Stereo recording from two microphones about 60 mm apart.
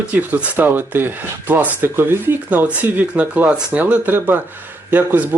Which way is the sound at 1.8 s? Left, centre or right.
Right.